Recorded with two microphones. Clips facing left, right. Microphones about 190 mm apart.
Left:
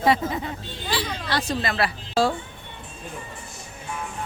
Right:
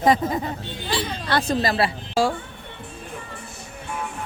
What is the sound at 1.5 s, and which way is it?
Speech, 35° right (ahead or behind).